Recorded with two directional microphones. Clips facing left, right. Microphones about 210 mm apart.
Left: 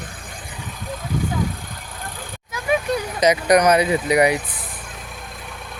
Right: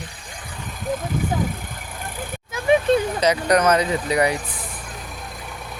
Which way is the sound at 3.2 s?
10° left (ahead or behind).